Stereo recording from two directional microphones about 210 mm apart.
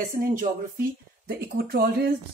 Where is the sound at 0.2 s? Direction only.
40° right (ahead or behind).